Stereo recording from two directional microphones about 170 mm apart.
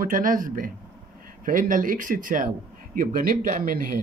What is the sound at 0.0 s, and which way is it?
A man's voice, 55° right (ahead or behind).